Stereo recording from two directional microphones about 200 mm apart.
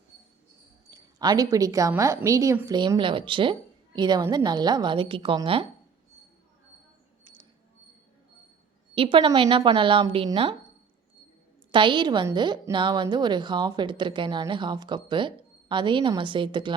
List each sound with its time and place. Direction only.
0.9 s a woman's voice: 20° right (ahead or behind)
9.0 s a woman's voice: 25° right (ahead or behind)
11.7 s a woman's voice: 25° right (ahead or behind)